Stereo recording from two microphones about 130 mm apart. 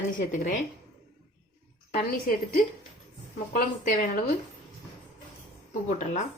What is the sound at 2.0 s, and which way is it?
Speech, 90° left.